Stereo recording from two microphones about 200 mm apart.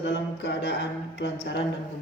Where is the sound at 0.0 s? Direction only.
60° left (ahead or behind).